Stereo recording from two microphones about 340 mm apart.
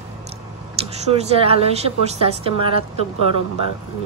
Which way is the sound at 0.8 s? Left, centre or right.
Centre.